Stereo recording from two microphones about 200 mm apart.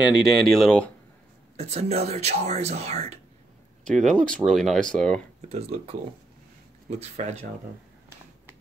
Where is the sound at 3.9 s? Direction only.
5° left (ahead or behind).